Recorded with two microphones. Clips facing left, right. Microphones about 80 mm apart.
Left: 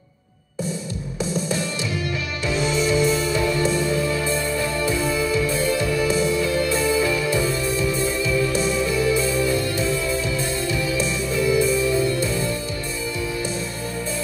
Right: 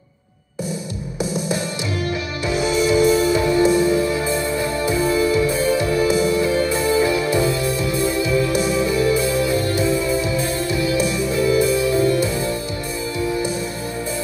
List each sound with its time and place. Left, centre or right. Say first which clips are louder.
2.5 s music: right 4 dB; centre